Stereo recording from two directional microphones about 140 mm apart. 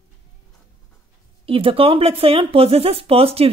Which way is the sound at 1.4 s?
40° right (ahead or behind).